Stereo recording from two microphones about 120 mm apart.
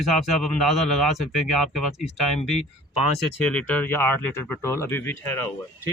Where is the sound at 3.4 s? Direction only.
10° left (ahead or behind).